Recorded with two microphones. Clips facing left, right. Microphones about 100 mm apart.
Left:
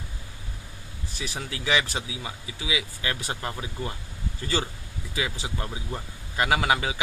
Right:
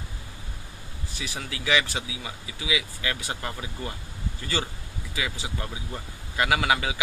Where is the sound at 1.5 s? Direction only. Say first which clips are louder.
Right 1 dB; 35° left (ahead or behind); by 3.9 s 20° left (ahead or behind).